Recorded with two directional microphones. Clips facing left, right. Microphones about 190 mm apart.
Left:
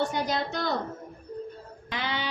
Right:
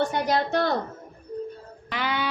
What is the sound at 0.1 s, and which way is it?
Speech, 60° right (ahead or behind).